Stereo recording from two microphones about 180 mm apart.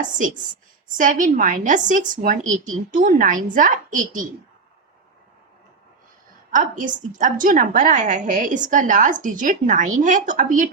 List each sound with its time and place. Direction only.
0.9 s a woman's voice: 50° right (ahead or behind)
6.5 s a woman's voice: 45° right (ahead or behind)